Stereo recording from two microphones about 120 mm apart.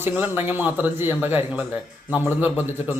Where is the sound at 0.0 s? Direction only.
20° right (ahead or behind).